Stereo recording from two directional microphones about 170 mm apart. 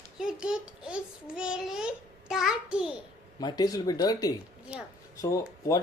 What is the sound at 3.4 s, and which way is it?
Speech, 25° left (ahead or behind).